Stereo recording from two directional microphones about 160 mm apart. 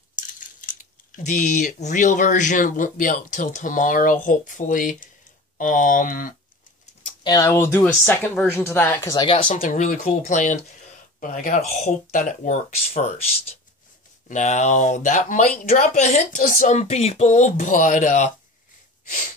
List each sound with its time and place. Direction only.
0.1 s speech: 55° left (ahead or behind)
7.2 s speech: 20° left (ahead or behind)
9.0 s speech: 25° left (ahead or behind)
9.5 s speech: 50° left (ahead or behind)
14.2 s speech: 50° left (ahead or behind)